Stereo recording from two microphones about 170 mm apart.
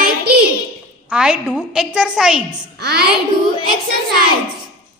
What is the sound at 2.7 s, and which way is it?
Speech, 70° right (ahead or behind).